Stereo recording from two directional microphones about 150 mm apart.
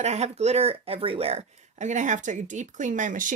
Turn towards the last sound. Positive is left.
turn(degrees=-60)  # may be behind; listen again after turning